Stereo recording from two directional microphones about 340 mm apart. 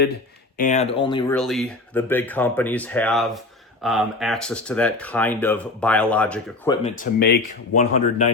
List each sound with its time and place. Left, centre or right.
0.5 s speech: left
1.4 s speech: centre
6.8 s speech: left